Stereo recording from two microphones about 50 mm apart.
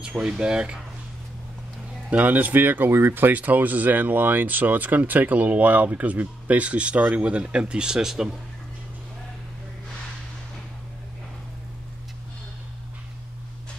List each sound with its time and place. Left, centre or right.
0.0 s speech: right
2.0 s speech: right
2.9 s speech: right; by 8.4 s centre